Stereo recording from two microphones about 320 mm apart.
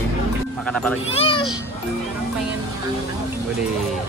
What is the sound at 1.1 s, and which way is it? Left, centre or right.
Speech, centre.